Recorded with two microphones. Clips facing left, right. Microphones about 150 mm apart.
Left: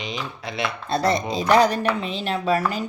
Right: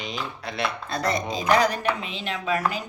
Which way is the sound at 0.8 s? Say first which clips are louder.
Left 7 dB; 30° left (ahead or behind).